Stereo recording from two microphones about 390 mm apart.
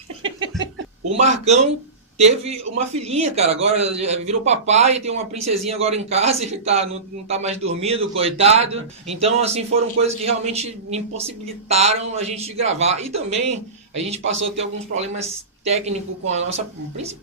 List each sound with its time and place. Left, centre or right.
0.2 s a sound: centre
1.2 s a man's voice: centre
14.6 s a man's voice: centre